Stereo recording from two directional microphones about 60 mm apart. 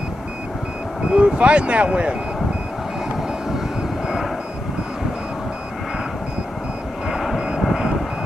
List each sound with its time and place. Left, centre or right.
1.1 s speech: centre
7.1 s vehicle: centre